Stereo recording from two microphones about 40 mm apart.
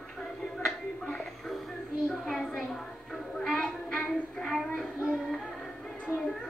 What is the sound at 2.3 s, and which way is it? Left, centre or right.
Music, centre.